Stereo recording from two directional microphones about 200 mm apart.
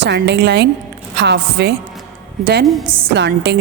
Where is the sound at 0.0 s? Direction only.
60° right (ahead or behind).